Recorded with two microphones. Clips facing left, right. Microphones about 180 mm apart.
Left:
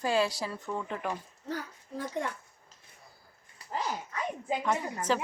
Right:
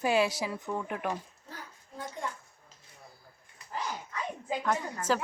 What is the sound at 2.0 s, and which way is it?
Speech, 70° left (ahead or behind).